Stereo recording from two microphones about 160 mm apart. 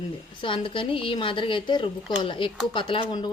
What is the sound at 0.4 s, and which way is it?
A woman's voice, 30° left (ahead or behind).